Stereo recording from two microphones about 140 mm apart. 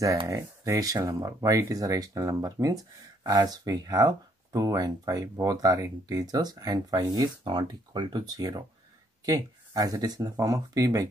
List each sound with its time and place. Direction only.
0.3 s speech: 25° right (ahead or behind)